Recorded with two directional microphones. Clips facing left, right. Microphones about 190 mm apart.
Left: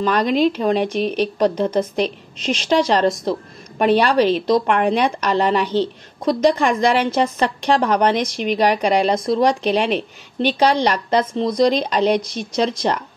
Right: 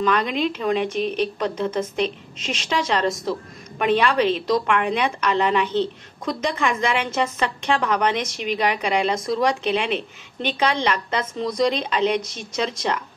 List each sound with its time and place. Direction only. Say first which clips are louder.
0.0 s a woman's voice: left 5 dB; 40° left (ahead or behind)